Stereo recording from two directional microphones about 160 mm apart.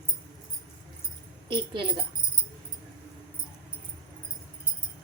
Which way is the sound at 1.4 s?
30° right (ahead or behind).